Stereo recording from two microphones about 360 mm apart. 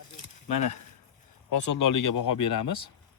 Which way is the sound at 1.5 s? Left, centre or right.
Left.